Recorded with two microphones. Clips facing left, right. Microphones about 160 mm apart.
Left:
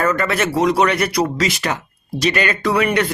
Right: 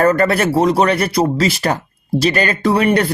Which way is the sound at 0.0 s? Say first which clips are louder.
Right 5 dB; 35° right (ahead or behind).